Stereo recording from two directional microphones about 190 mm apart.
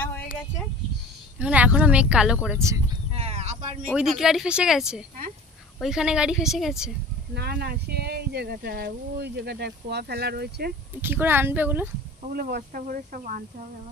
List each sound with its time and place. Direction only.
1.4 s speech: 5° right (ahead or behind)
3.1 s a sound: 30° right (ahead or behind)
3.9 s a woman's voice: 5° right (ahead or behind)
7.3 s speech: 55° right (ahead or behind)
11.0 s speech: 10° right (ahead or behind)
12.2 s speech: 50° right (ahead or behind)